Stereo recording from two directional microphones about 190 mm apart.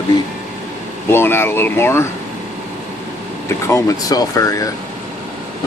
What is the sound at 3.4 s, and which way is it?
Speech, 15° left (ahead or behind).